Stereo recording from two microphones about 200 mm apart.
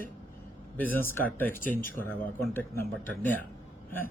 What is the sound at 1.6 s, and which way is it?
Speech, 45° left (ahead or behind).